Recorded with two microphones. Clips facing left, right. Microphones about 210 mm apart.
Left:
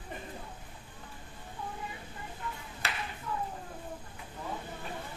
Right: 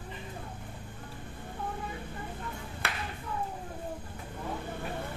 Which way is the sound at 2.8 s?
55° right (ahead or behind).